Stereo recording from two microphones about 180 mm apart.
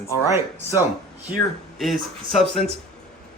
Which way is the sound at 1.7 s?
Centre (ahead or behind).